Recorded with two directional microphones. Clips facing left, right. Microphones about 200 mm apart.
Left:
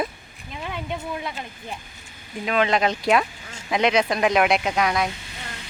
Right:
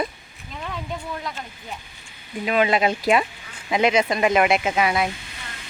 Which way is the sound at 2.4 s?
5° right (ahead or behind).